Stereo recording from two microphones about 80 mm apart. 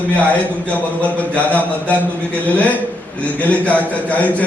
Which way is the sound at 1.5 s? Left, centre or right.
Centre.